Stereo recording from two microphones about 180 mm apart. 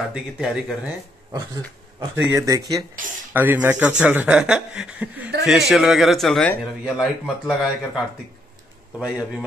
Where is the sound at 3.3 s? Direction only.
10° right (ahead or behind).